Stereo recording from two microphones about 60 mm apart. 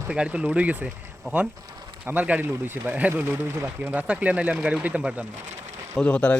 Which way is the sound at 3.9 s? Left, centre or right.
Right.